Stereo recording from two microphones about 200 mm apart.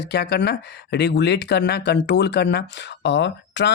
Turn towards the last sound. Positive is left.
turn(degrees=60)  # may be behind; listen again after turning